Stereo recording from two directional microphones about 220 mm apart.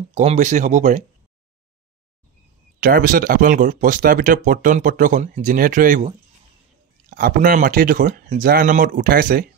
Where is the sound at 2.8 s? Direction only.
40° right (ahead or behind).